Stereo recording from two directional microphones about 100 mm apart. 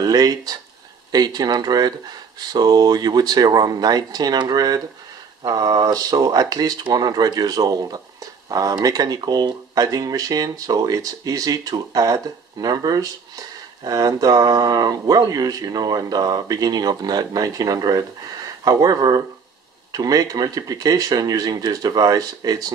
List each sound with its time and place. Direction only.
0.0 s speech: 40° right (ahead or behind)